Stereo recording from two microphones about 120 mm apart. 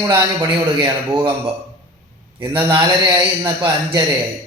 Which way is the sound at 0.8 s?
45° right (ahead or behind).